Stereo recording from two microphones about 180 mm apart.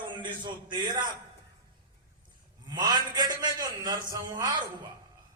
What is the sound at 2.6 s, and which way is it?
A man's voice, 20° right (ahead or behind).